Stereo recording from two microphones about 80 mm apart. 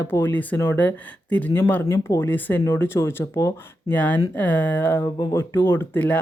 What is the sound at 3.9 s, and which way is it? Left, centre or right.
Speech, centre.